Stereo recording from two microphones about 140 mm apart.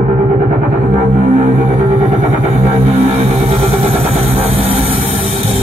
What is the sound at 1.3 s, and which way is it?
Music, 60° right (ahead or behind).